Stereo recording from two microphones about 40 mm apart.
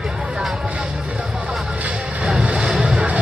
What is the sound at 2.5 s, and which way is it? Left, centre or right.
Music, centre.